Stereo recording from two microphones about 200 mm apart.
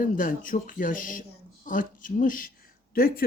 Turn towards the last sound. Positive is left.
turn(degrees=50)  # may be behind; listen again after turning